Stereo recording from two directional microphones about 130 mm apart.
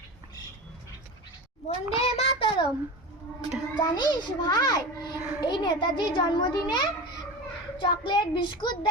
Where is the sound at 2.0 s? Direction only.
50° left (ahead or behind).